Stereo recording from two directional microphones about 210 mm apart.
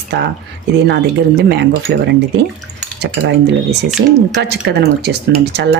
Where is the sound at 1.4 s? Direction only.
50° right (ahead or behind).